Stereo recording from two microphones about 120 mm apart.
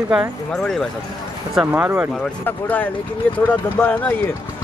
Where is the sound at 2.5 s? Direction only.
15° left (ahead or behind).